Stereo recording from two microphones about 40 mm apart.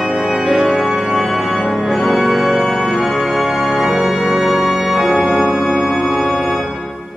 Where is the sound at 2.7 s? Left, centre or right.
Centre.